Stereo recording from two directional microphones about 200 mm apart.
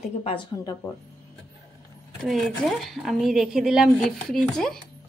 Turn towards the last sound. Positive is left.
turn(degrees=0)  # may be behind; listen again after turning